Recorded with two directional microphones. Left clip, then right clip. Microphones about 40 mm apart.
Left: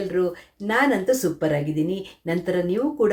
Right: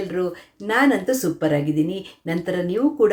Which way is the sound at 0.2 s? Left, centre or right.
Right.